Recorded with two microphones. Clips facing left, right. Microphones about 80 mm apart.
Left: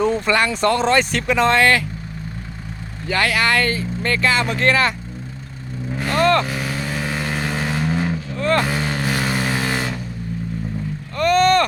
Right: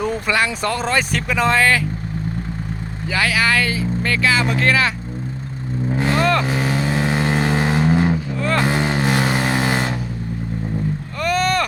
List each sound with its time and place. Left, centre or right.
0.0 s speech: centre
3.1 s speech: centre
5.9 s vehicle: right
6.1 s vehicle: centre
6.4 s vehicle: right
8.4 s vehicle: centre
8.6 s vehicle: right
11.2 s vehicle: centre